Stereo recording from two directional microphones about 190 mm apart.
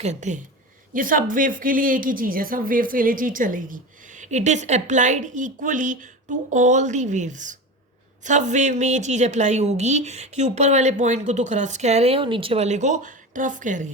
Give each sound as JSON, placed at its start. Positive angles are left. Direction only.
{"t": 0.0, "sound": "a woman's voice", "side_deg": -40}